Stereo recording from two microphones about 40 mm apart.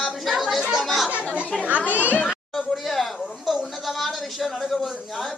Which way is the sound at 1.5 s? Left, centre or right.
Centre.